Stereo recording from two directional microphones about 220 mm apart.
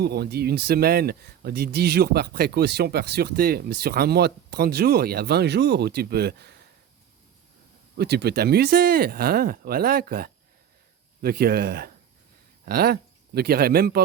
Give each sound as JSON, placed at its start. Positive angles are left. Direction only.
{"t": 0.0, "sound": "speech", "side_deg": -45}
{"t": 7.9, "sound": "speech", "side_deg": -50}